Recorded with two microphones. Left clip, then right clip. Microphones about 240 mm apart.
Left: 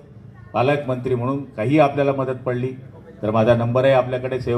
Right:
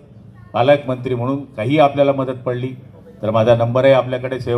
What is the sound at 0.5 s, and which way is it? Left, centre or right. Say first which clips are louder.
A man's voice: right 5 dB; right.